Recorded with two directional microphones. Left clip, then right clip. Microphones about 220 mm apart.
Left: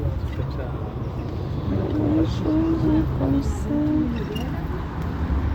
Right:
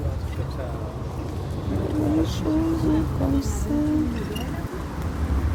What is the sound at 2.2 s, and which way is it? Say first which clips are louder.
Vehicle: left 2 dB; 10° right (ahead or behind).